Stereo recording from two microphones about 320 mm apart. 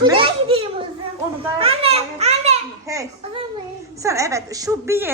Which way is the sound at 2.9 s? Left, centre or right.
Centre.